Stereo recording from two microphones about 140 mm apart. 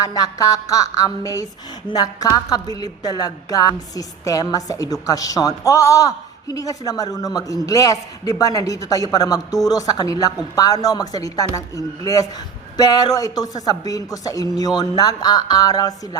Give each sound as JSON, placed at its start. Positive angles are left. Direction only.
{"t": 0.0, "sound": "a woman's voice", "side_deg": 25}